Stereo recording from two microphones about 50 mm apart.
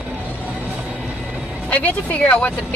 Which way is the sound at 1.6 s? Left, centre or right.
Left.